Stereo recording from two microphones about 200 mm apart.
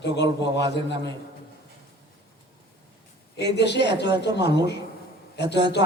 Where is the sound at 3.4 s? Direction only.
60° left (ahead or behind).